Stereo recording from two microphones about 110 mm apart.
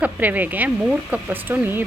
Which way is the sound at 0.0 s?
15° right (ahead or behind).